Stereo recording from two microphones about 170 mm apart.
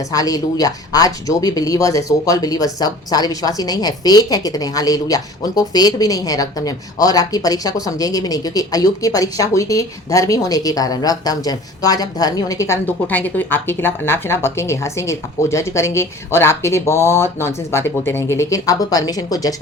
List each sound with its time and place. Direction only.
0.1 s speech: 20° left (ahead or behind)